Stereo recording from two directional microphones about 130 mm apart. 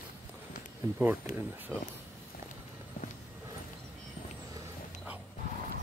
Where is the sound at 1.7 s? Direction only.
5° left (ahead or behind).